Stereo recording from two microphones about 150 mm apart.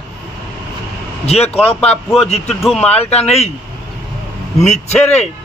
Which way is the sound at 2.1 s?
45° left (ahead or behind).